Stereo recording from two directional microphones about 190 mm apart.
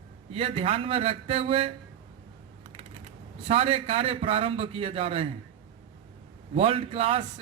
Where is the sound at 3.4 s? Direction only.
30° right (ahead or behind).